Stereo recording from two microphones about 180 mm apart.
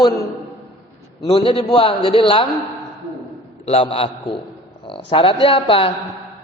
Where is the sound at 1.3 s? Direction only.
30° left (ahead or behind).